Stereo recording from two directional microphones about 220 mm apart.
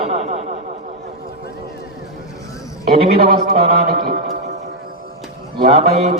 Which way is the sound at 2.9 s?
30° right (ahead or behind).